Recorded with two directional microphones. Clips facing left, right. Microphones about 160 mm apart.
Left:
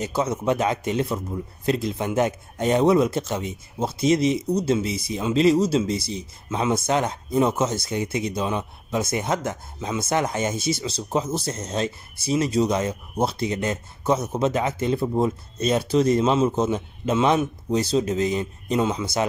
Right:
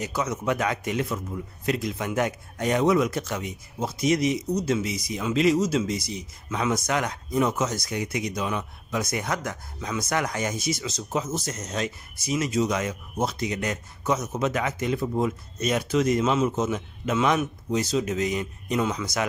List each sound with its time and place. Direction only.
0.0 s a man's voice: 30° left (ahead or behind)